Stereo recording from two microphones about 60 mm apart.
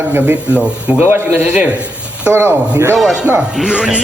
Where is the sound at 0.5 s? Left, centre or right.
Right.